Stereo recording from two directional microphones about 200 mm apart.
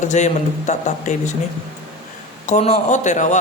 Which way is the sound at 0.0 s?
35° left (ahead or behind).